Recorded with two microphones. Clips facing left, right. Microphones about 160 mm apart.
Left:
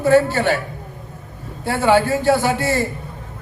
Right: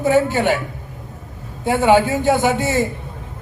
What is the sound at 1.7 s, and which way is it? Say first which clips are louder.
A man's voice: right 2 dB; 20° right (ahead or behind).